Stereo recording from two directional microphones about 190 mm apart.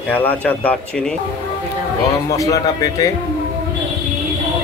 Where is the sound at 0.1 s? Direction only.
10° left (ahead or behind).